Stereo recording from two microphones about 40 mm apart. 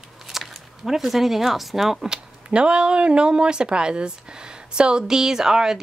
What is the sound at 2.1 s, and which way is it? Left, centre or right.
Speech, right.